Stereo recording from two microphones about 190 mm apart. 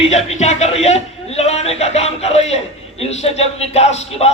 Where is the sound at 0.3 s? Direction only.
35° left (ahead or behind).